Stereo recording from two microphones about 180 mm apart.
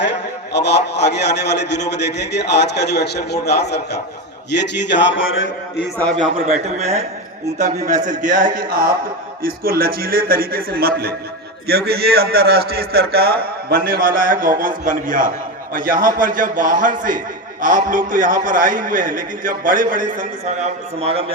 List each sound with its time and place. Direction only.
0.5 s a man's voice: 70° left (ahead or behind); by 5.5 s 90° left
6.3 s a man's voice: 35° right (ahead or behind)